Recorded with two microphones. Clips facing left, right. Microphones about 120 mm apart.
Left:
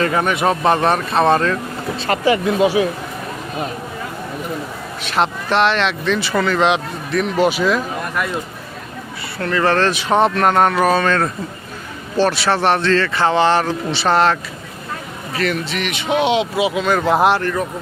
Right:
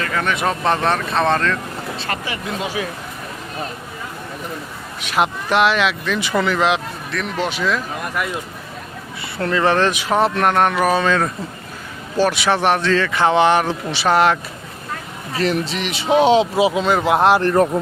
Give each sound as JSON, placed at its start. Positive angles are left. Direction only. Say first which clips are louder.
{"t": 0.0, "sound": "speech", "louder": "left 5 dB", "side_deg": 25}
{"t": 0.3, "sound": "speech", "louder": "left 3 dB", "side_deg": 5}
{"t": 2.0, "sound": "speech", "louder": "left 12 dB", "side_deg": 30}
{"t": 5.0, "sound": "speech", "louder": "even", "side_deg": -10}
{"t": 6.6, "sound": "speech", "louder": "left 2 dB", "side_deg": 0}
{"t": 9.5, "sound": "speech", "louder": "even", "side_deg": -15}
{"t": 10.1, "sound": "speech", "louder": "left 4 dB", "side_deg": -5}
{"t": 10.7, "sound": "speech", "louder": "left 1 dB", "side_deg": -10}
{"t": 15.4, "sound": "speech", "louder": "right 1 dB", "side_deg": -35}
{"t": 16.9, "sound": "speech", "louder": "even", "side_deg": -15}